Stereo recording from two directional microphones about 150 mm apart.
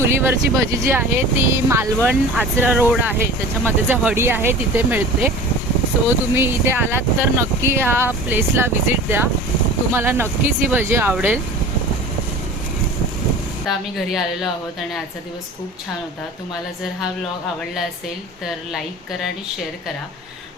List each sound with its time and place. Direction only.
0.0 s speech: 15° right (ahead or behind)
6.3 s speech: 15° right (ahead or behind)
13.7 s a woman's voice: centre (ahead or behind)